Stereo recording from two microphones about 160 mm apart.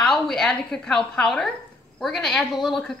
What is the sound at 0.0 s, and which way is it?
A woman's voice, 5° left (ahead or behind).